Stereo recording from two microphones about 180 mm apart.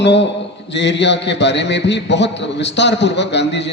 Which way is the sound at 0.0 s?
75° left (ahead or behind).